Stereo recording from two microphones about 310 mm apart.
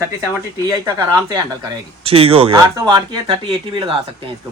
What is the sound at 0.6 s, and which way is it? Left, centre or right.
Speech, centre.